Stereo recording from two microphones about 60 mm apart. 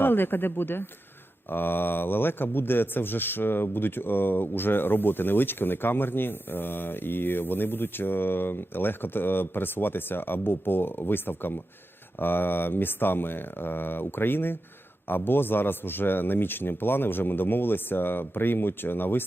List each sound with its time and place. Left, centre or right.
0.0 s speech: left